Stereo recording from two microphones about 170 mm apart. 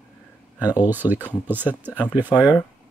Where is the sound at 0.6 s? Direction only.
25° left (ahead or behind).